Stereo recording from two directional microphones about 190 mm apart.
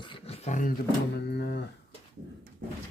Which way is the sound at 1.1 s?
60° left (ahead or behind).